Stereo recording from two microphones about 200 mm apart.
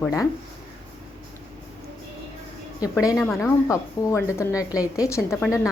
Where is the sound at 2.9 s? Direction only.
15° left (ahead or behind).